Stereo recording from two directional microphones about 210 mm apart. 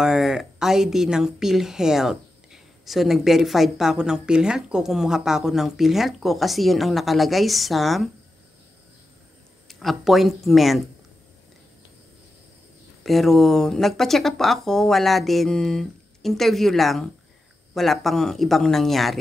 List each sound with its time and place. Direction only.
0.0 s a woman's voice: 5° right (ahead or behind)
9.7 s a woman's voice: centre (ahead or behind)
13.0 s a woman's voice: centre (ahead or behind)